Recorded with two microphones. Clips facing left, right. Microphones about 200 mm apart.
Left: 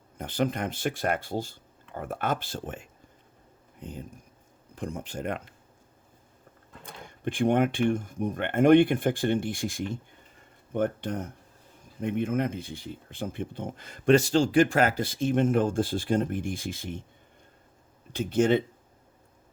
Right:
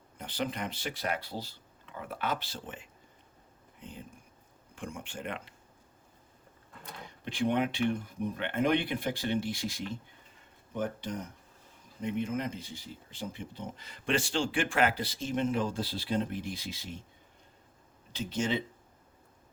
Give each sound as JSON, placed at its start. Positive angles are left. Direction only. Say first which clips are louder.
{"t": 0.2, "sound": "speech", "louder": "left 7 dB", "side_deg": 50}
{"t": 6.8, "sound": "speech", "louder": "left 8 dB", "side_deg": 50}
{"t": 18.1, "sound": "speech", "louder": "left 9 dB", "side_deg": 55}